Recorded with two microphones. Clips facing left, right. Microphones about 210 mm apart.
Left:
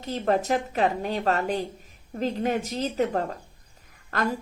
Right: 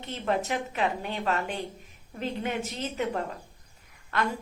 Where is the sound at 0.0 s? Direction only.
40° left (ahead or behind).